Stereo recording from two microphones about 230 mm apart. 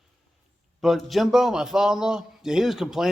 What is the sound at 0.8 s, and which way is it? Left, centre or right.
A man's voice, centre.